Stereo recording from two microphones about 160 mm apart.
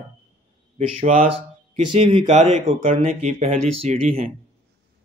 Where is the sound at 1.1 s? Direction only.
35° right (ahead or behind).